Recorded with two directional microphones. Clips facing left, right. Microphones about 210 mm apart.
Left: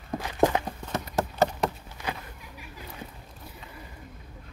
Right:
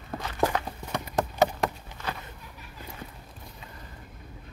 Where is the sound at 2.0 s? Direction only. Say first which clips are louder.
Left 1 dB; 15° left (ahead or behind).